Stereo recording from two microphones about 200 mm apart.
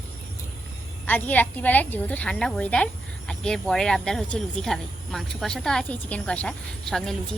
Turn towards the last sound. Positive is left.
turn(degrees=5)  # may be behind; listen again after turning